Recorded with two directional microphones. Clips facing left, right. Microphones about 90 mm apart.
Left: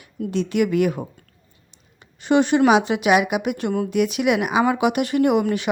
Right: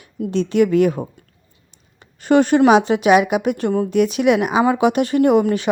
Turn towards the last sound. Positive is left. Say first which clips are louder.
# right 4 dB
turn(degrees=-35)  # may be behind; listen again after turning